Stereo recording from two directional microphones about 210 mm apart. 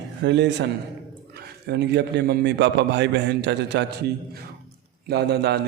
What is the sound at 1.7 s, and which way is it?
A man's voice, 55° right (ahead or behind).